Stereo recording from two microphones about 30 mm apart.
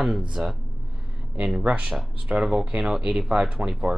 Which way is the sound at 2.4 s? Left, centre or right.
Right.